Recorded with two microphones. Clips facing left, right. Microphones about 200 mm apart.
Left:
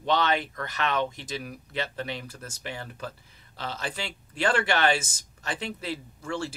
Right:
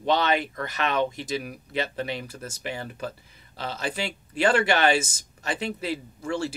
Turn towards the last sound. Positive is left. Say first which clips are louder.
# right 4 dB
turn(degrees=-10)  # may be behind; listen again after turning